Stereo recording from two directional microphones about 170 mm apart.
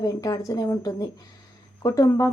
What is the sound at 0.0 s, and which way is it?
Speech, 20° left (ahead or behind).